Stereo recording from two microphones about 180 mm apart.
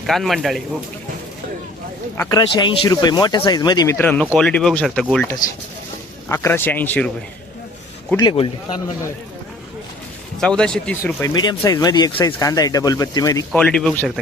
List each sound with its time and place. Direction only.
0.0 s speech: centre (ahead or behind)
2.1 s speech: 15° left (ahead or behind)
2.6 s speech: 25° left (ahead or behind)
3.9 s speech: 10° left (ahead or behind)
6.2 s speech: 15° left (ahead or behind)
8.2 s speech: 25° left (ahead or behind)
10.4 s speech: 5° left (ahead or behind)
11.0 s speech: 20° left (ahead or behind)
13.5 s speech: 5° left (ahead or behind)